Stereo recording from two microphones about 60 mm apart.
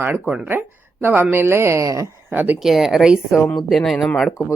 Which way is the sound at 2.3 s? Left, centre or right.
Right.